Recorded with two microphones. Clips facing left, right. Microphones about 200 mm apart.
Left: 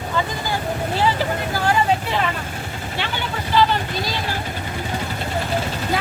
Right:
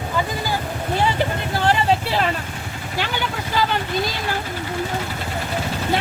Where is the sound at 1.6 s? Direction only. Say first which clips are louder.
Right 1 dB; 35° right (ahead or behind).